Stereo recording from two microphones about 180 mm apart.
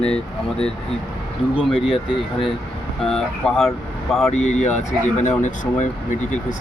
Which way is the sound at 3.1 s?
Centre (ahead or behind).